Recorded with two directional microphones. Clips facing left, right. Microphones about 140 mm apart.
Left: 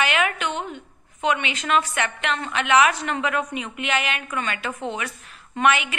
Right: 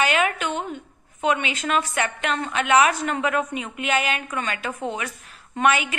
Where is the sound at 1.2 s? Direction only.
35° right (ahead or behind).